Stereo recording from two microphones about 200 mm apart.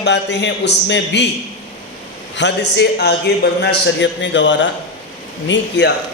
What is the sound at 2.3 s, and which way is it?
A man's voice, 60° left (ahead or behind).